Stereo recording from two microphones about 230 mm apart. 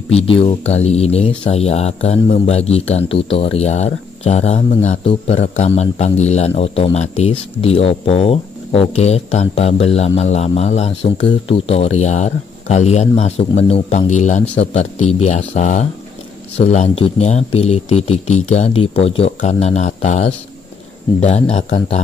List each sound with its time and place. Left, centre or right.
0.1 s speech: left